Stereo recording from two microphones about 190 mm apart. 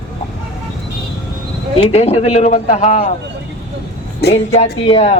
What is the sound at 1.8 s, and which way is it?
Speech, 30° left (ahead or behind).